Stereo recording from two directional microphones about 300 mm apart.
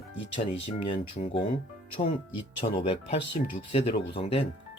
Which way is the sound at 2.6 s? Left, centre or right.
Left.